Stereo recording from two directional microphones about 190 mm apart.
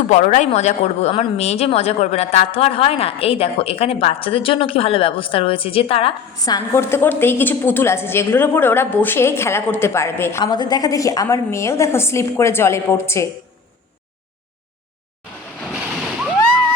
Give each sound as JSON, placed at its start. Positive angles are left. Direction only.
{"t": 0.1, "sound": "speech", "side_deg": 40}
{"t": 6.4, "sound": "a woman's voice", "side_deg": 15}
{"t": 15.6, "sound": "splash", "side_deg": -5}